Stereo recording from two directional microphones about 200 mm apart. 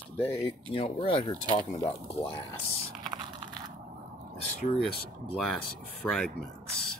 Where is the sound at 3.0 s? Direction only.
20° right (ahead or behind).